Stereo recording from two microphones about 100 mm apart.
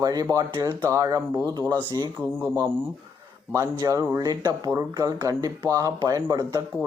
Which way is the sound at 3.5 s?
30° right (ahead or behind).